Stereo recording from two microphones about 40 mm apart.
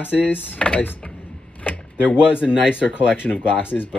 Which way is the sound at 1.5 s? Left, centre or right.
Left.